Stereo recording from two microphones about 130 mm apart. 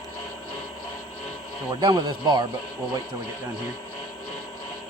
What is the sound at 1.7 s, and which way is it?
Speech, 30° right (ahead or behind).